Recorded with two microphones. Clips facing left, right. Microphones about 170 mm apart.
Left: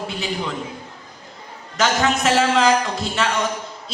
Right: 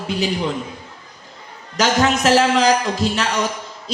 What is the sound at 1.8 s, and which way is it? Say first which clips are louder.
A man's voice: right 2 dB; 35° right (ahead or behind).